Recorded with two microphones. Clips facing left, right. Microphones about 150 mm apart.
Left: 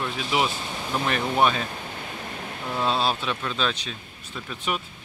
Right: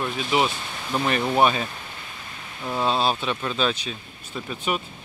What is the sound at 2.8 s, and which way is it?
Speech, centre (ahead or behind).